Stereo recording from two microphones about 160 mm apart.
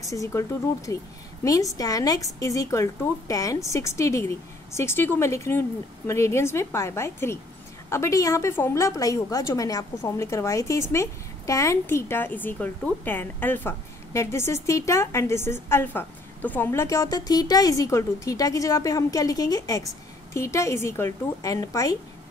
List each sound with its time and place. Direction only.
0.0 s a woman's voice: 20° left (ahead or behind)